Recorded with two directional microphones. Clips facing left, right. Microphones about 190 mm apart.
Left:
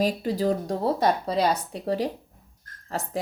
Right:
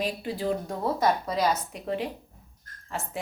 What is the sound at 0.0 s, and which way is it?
Speech, 40° left (ahead or behind).